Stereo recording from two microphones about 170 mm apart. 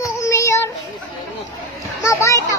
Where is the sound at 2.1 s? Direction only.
15° left (ahead or behind).